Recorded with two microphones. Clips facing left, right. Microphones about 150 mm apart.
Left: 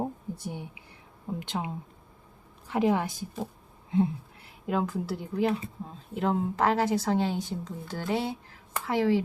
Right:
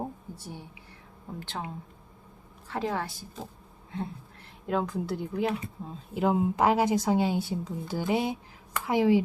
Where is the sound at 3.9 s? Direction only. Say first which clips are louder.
Left 10 dB; 15° left (ahead or behind).